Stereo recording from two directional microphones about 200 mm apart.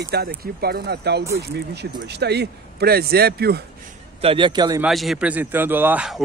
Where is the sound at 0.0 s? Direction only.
55° right (ahead or behind).